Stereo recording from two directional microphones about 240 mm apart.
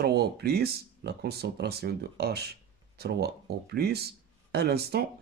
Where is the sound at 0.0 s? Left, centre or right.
Right.